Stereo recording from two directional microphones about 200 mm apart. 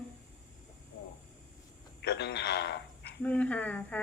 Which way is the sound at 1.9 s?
55° left (ahead or behind).